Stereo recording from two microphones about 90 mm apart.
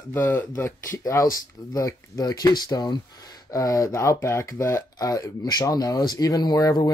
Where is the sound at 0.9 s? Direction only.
40° left (ahead or behind).